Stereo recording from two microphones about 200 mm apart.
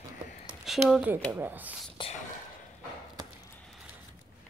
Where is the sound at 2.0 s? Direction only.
25° left (ahead or behind).